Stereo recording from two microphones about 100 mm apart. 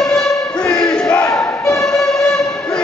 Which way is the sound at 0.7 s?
10° left (ahead or behind).